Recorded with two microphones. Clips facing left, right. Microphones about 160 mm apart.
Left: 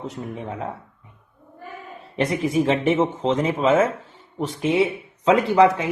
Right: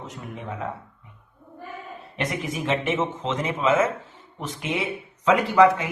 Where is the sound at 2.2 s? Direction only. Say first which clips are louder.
Left 7 dB; 30° left (ahead or behind).